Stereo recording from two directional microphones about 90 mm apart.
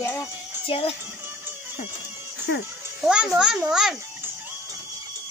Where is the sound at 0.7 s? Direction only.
90° left.